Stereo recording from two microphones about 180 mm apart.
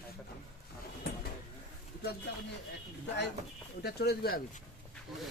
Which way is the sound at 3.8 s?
60° left (ahead or behind).